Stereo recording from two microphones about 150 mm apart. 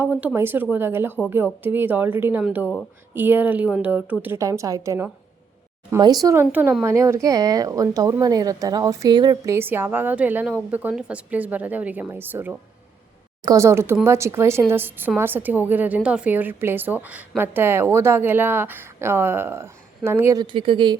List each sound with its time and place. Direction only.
0.0 s a woman's voice: 10° right (ahead or behind); by 9.6 s 25° right (ahead or behind)
9.6 s a woman's voice: 15° right (ahead or behind); by 21.0 s 30° right (ahead or behind)